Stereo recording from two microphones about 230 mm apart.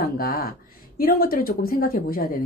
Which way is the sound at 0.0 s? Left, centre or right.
Left.